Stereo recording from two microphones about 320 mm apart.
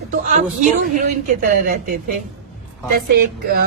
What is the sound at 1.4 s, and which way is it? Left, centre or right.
Speech, right.